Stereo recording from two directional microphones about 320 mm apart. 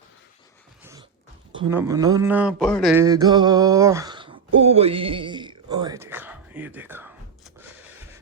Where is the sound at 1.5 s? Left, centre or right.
Centre.